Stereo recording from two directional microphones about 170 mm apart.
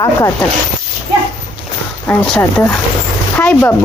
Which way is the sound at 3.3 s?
10° left (ahead or behind).